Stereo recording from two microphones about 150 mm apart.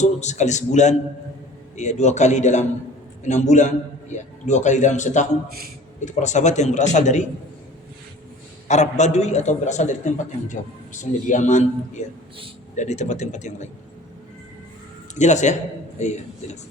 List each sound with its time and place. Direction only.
0.0 s a man's voice: 50° left (ahead or behind)
5.5 s a man's voice: 90° right
6.1 s a man's voice: 55° left (ahead or behind)
8.6 s a man's voice: 50° left (ahead or behind)
15.1 s a man's voice: 50° left (ahead or behind)